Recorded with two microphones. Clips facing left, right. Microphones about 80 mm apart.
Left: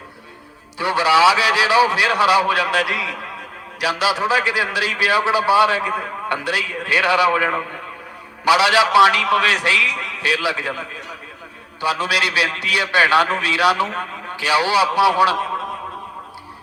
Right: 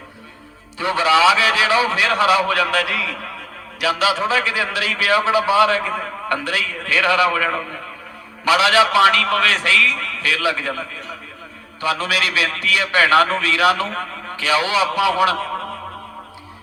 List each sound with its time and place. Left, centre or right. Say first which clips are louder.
0.8 s a man's voice: left 1 dB; centre